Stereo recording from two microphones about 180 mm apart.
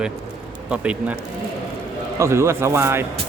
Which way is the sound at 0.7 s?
5° right (ahead or behind).